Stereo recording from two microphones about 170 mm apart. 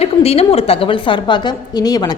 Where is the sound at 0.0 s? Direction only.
35° left (ahead or behind).